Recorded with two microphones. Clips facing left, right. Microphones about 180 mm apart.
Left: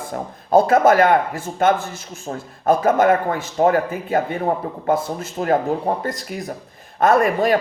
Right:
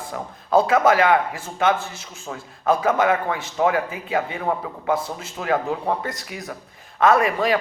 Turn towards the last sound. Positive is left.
turn(degrees=45)  # may be behind; listen again after turning